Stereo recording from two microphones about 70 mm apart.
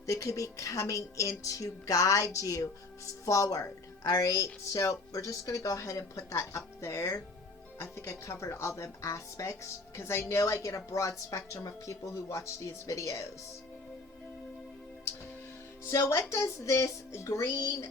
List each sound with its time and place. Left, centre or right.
0.1 s speech: left
4.0 s a woman's voice: left
4.7 s speech: left
15.8 s speech: left